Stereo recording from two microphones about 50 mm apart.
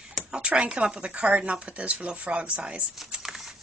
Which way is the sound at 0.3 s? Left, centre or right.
Right.